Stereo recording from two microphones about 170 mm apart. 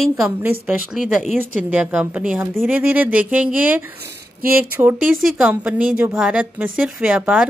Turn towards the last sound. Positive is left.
turn(degrees=-5)  # may be behind; listen again after turning